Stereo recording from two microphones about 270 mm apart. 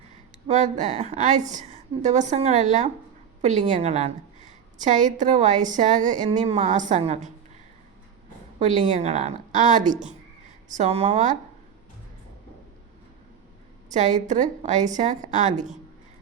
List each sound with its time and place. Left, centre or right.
0.4 s a woman's voice: right
8.5 s a woman's voice: right
13.9 s a woman's voice: right